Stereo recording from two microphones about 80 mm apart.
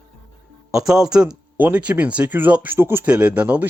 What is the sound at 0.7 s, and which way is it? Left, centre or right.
Speech, centre.